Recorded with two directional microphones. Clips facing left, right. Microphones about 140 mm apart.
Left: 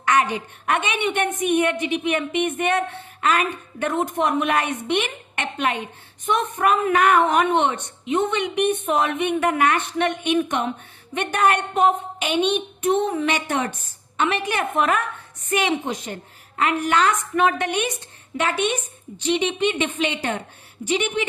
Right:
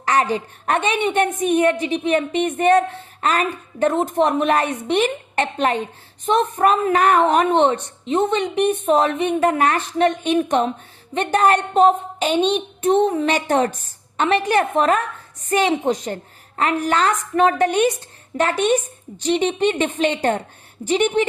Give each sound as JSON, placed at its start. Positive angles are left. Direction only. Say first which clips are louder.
{"t": 0.0, "sound": "a woman's voice", "louder": "right 1 dB", "side_deg": -35}